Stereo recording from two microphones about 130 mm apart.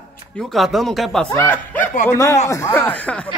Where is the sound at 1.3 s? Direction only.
15° left (ahead or behind).